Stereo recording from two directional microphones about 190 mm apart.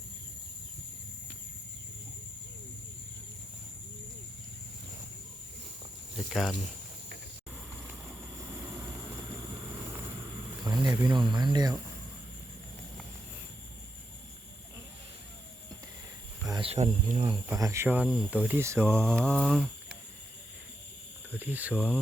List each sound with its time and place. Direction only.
6.3 s speech: centre (ahead or behind)
10.7 s speech: 20° right (ahead or behind)
16.5 s speech: 30° right (ahead or behind)
17.5 s speech: 15° right (ahead or behind)
19.3 s speech: centre (ahead or behind)
21.3 s speech: 10° right (ahead or behind)